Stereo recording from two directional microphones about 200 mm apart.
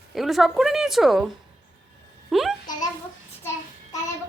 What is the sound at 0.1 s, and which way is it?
Speech, centre (ahead or behind).